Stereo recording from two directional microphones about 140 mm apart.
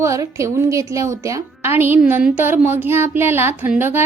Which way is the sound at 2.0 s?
10° right (ahead or behind).